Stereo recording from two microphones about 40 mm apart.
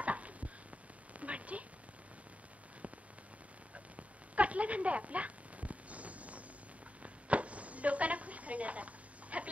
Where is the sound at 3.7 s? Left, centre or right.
Right.